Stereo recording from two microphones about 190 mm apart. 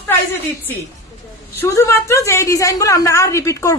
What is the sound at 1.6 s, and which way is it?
A woman's voice, 15° left (ahead or behind).